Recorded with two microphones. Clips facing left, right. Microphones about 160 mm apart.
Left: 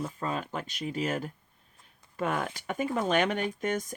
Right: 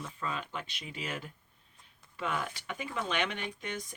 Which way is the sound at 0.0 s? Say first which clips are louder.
Left 5 dB; 40° left (ahead or behind).